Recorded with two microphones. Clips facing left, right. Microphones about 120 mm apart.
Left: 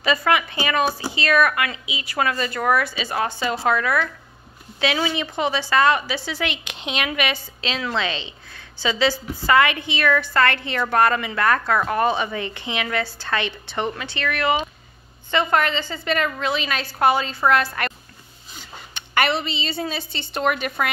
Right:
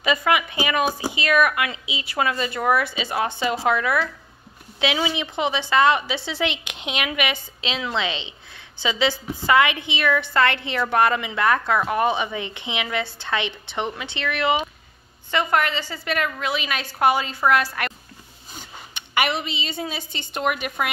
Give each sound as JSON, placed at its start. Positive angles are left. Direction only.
{"t": 0.0, "sound": "a woman's voice", "side_deg": -15}
{"t": 18.9, "sound": "a woman's voice", "side_deg": -10}